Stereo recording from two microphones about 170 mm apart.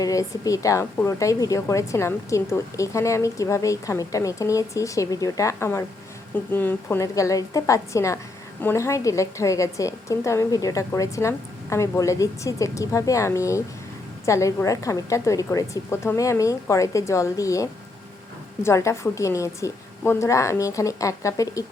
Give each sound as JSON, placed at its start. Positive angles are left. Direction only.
{"t": 0.0, "sound": "a woman's voice", "side_deg": 20}